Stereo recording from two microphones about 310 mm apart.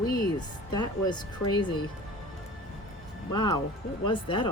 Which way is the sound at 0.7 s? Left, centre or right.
Centre.